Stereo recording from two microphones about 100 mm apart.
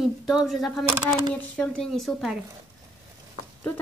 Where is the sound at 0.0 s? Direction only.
5° right (ahead or behind).